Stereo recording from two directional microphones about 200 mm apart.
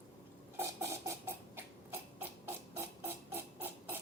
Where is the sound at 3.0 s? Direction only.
10° right (ahead or behind).